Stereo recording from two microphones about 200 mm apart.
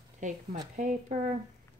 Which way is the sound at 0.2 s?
40° right (ahead or behind).